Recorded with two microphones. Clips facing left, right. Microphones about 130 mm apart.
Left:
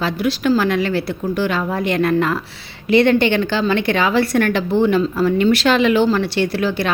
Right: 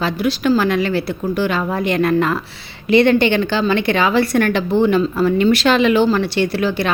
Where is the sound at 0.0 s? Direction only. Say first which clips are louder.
Right 1 dB; 20° right (ahead or behind).